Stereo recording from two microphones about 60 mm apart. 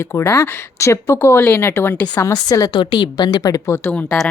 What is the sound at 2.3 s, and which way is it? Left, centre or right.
Speech, left.